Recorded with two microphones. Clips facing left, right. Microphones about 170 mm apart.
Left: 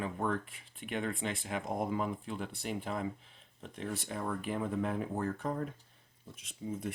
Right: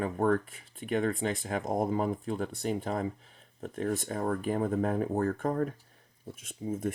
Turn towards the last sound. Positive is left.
turn(degrees=-45)  # may be behind; listen again after turning